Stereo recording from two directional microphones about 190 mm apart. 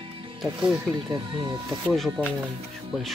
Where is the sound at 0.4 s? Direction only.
5° right (ahead or behind).